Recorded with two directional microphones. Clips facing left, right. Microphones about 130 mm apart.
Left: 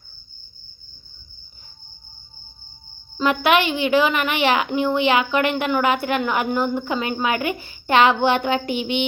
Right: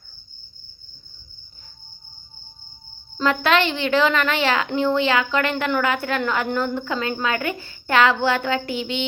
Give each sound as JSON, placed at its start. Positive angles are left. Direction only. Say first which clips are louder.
{"t": 3.2, "sound": "a woman's voice", "louder": "left 1 dB", "side_deg": 15}